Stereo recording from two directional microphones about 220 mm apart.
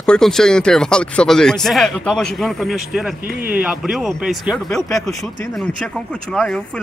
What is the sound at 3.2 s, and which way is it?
Speech, 40° right (ahead or behind).